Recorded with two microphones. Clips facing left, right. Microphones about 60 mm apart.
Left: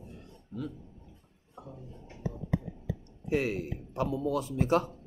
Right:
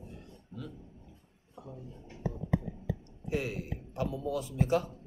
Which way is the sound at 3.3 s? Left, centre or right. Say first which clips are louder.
Left 4 dB; left.